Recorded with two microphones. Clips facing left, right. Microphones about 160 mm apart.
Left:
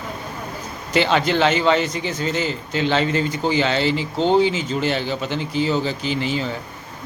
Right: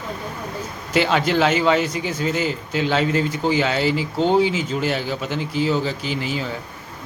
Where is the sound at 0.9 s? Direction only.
5° right (ahead or behind).